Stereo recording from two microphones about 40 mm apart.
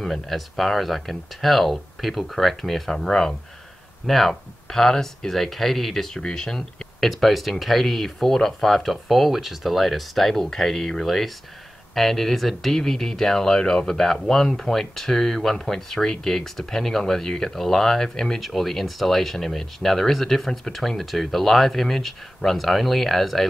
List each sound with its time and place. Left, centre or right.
0.0 s speech: centre
3.1 s speech: centre
4.0 s speech: centre
7.1 s speech: centre